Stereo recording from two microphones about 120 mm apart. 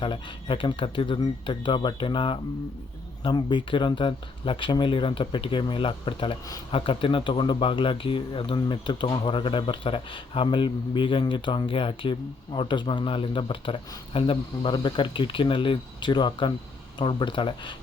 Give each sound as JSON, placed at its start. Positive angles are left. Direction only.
{"t": 0.0, "sound": "speech", "side_deg": 45}